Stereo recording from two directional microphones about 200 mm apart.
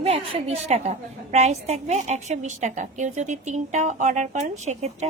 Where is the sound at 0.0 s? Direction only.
30° right (ahead or behind).